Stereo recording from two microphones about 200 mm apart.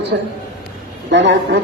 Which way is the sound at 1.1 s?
65° right (ahead or behind).